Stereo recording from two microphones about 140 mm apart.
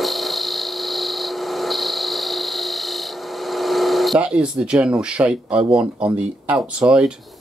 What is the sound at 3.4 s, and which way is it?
Speech, centre (ahead or behind).